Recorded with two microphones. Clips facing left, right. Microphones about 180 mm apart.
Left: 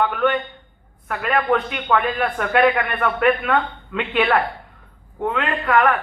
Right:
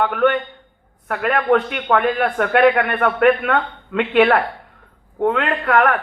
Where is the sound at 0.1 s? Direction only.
60° right (ahead or behind).